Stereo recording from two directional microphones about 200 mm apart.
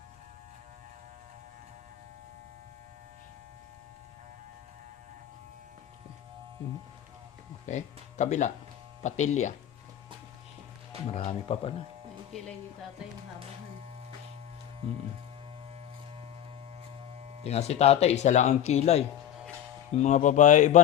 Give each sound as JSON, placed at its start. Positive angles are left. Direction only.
{"t": 7.7, "sound": "speech", "side_deg": 35}
{"t": 11.1, "sound": "speech", "side_deg": 30}
{"t": 17.4, "sound": "speech", "side_deg": 30}